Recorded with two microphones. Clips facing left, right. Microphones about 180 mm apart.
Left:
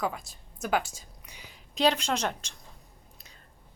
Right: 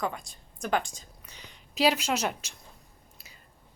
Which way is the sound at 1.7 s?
5° right (ahead or behind).